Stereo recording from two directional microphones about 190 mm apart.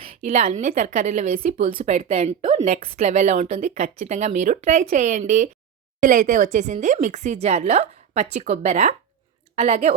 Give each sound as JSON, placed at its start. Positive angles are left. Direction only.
{"t": 0.0, "sound": "a woman's voice", "side_deg": -35}